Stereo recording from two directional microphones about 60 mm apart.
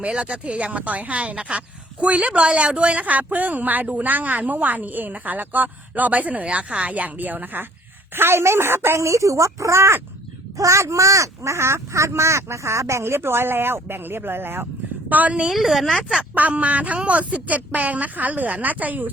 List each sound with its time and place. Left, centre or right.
0.0 s speech: centre; by 9.0 s right
9.0 s a woman's voice: right
15.4 s a woman's voice: centre
16.3 s speech: right